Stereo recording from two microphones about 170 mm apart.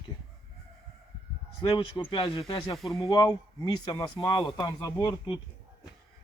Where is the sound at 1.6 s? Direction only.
30° left (ahead or behind).